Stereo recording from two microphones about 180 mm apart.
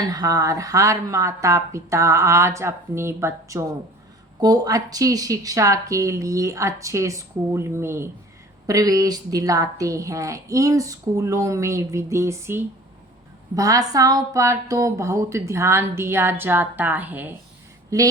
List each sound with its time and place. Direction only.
0.1 s a woman's voice: 20° right (ahead or behind)